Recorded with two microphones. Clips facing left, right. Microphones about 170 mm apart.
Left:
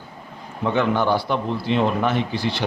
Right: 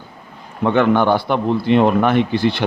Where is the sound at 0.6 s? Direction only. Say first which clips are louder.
Right 6 dB; 60° right (ahead or behind).